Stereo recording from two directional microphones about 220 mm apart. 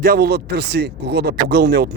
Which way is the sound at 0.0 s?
45° right (ahead or behind).